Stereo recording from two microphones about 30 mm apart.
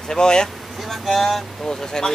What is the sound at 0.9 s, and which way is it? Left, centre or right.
Speech, centre.